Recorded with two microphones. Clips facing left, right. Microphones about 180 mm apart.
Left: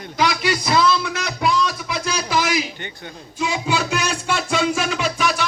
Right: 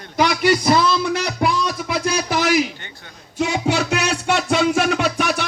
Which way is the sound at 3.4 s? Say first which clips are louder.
Right 3 dB; 70° right (ahead or behind).